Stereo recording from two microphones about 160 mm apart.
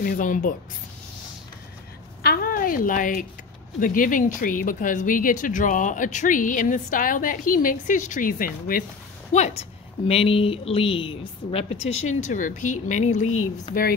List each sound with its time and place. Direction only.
0.0 s speech: 60° left (ahead or behind)
2.2 s a sound: 65° left (ahead or behind)
3.8 s speech: 60° left (ahead or behind)
9.3 s a woman's voice: 40° left (ahead or behind)